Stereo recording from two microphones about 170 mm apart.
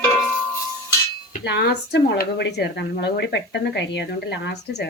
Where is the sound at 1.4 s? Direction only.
80° left.